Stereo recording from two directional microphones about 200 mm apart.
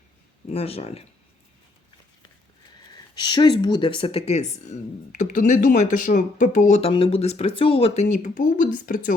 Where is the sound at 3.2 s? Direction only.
20° left (ahead or behind).